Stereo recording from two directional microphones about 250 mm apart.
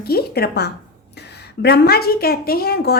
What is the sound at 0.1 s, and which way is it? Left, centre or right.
A woman's voice, left.